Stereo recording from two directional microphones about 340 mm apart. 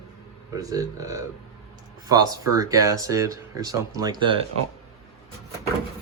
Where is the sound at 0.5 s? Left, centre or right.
Centre.